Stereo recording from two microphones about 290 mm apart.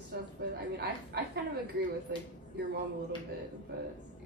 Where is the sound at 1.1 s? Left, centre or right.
Right.